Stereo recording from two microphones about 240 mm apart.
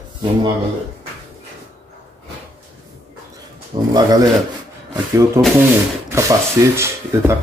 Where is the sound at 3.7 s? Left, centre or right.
Centre.